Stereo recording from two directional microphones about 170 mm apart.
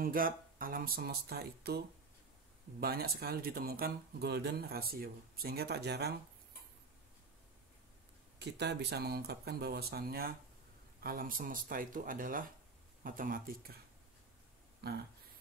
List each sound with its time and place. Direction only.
0.0 s speech: 55° right (ahead or behind)
2.8 s speech: 65° right (ahead or behind)
8.4 s speech: 80° right; by 13.7 s 55° right (ahead or behind)
14.8 s speech: 70° right (ahead or behind)